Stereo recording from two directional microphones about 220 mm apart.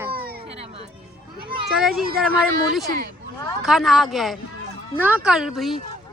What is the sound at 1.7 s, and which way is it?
Speech, centre (ahead or behind).